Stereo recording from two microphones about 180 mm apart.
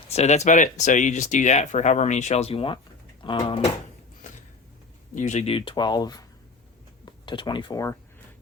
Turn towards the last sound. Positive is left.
turn(degrees=20)  # may be behind; listen again after turning